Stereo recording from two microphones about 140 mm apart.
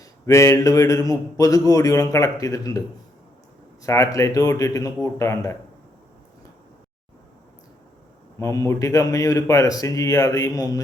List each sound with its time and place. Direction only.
0.0 s speech: 20° left (ahead or behind)
3.8 s speech: 20° left (ahead or behind)
8.4 s speech: 20° left (ahead or behind)